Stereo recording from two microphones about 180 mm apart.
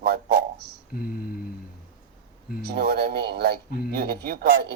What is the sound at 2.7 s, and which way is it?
Speech, 60° right (ahead or behind).